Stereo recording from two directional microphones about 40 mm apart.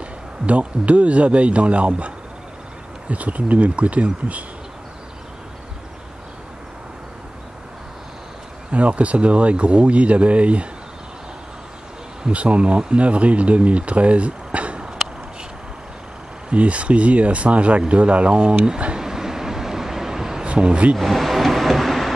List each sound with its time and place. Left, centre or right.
0.5 s speech: right
8.7 s speech: right
12.3 s speech: right
16.4 s speech: right
18.9 s a sound: centre
20.5 s speech: right
20.9 s vehicle: centre